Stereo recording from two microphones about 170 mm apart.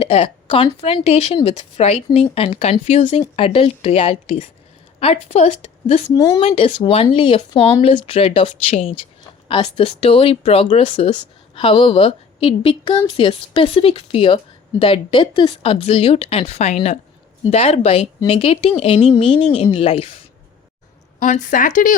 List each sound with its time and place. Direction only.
0.0 s a woman's voice: 35° left (ahead or behind)
6.1 s speech: 20° left (ahead or behind)
6.4 s a woman's voice: 40° left (ahead or behind)
21.2 s speech: 45° left (ahead or behind)